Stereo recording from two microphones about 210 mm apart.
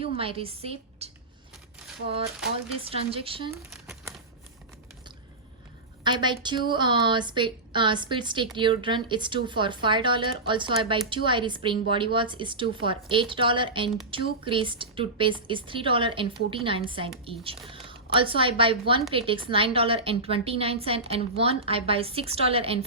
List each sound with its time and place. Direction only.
0.0 s a woman's voice: 25° right (ahead or behind)
2.8 s a woman's voice: 25° right (ahead or behind)
3.7 s crumpling: 5° right (ahead or behind)
6.0 s a woman's voice: 20° right (ahead or behind)